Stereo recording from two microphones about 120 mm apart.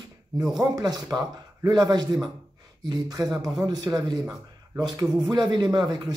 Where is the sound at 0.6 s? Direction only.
35° right (ahead or behind).